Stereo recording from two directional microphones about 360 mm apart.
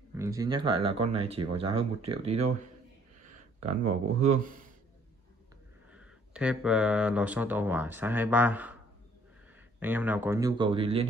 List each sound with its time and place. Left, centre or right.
0.1 s speech: centre
3.6 s speech: centre
5.9 s speech: centre
9.8 s speech: centre